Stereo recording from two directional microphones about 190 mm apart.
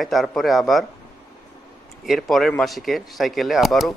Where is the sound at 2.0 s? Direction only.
Centre (ahead or behind).